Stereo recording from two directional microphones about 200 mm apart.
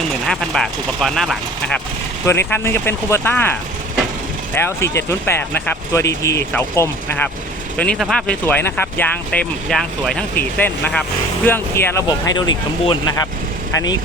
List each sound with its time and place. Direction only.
0.3 s speech: centre (ahead or behind); by 14.0 s 20° left (ahead or behind)